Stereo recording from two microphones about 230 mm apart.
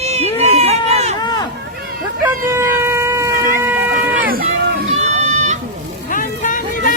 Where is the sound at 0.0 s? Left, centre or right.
Right.